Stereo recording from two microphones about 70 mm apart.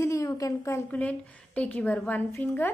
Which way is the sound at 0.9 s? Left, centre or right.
Left.